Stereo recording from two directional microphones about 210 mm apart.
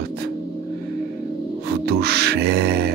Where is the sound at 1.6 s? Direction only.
50° right (ahead or behind).